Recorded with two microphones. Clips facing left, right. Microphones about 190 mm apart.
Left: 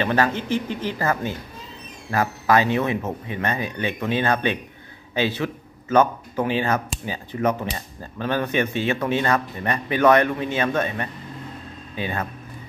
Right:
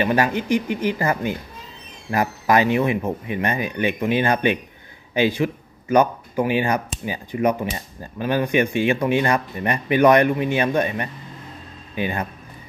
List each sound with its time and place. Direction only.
0.0 s speech: 15° right (ahead or behind)